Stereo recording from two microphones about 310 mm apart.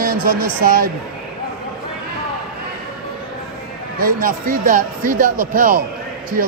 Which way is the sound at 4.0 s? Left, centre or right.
Right.